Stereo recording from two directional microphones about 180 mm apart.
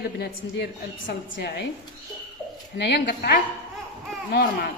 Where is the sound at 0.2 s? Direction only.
65° left (ahead or behind).